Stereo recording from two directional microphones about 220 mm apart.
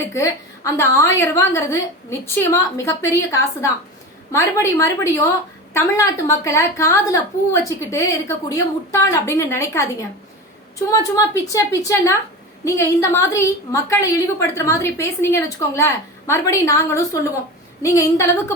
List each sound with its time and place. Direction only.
0.1 s a woman's voice: 15° left (ahead or behind)